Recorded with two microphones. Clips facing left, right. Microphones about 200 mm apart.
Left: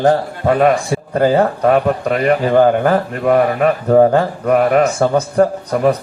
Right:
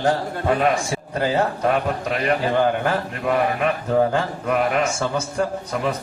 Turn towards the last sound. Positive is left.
turn(degrees=50)  # may be behind; listen again after turning